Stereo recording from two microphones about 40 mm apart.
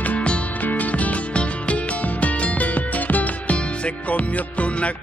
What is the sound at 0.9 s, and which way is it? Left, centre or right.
Music, left.